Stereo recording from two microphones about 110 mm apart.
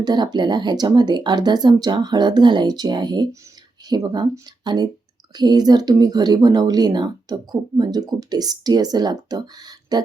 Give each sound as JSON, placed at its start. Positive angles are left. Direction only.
{"t": 0.0, "sound": "speech", "side_deg": -40}